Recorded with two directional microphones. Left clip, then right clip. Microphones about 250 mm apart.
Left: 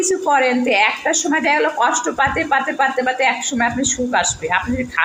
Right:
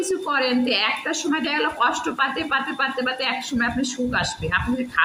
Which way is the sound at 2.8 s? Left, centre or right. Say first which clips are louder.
Left 7 dB; left.